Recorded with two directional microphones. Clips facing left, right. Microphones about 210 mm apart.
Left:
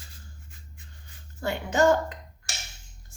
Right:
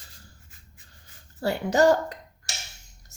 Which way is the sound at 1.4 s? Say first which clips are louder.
Right 2 dB; 35° right (ahead or behind).